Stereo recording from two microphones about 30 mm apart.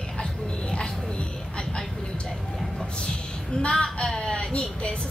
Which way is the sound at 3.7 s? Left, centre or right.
Left.